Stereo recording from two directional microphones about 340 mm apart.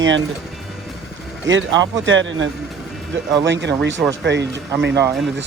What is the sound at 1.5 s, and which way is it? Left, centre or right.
Speech, right.